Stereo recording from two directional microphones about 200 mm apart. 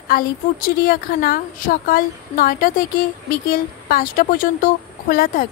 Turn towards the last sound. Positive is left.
turn(degrees=45)  # may be behind; listen again after turning